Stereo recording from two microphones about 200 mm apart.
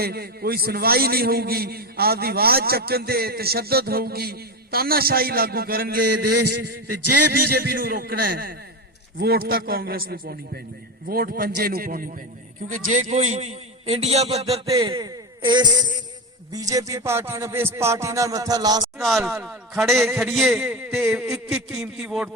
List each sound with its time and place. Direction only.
0.0 s a man's voice: 50° right (ahead or behind)
7.5 s a man's voice: 50° right (ahead or behind); by 14.6 s 30° right (ahead or behind)
14.7 s a sound: 20° right (ahead or behind)
16.5 s a man's voice: 15° right (ahead or behind)
18.9 s a man's voice: centre (ahead or behind)